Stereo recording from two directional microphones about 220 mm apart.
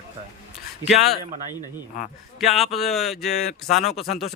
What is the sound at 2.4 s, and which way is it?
Speech, centre (ahead or behind).